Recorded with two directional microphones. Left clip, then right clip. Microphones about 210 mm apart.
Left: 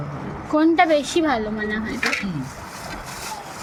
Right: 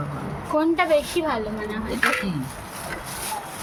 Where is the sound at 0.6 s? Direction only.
25° left (ahead or behind).